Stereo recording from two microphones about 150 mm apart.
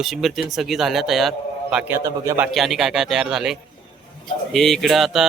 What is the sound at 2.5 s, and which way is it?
Speech, centre (ahead or behind).